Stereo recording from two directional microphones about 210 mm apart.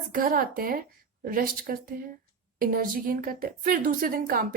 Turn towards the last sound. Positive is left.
turn(degrees=-45)  # may be behind; listen again after turning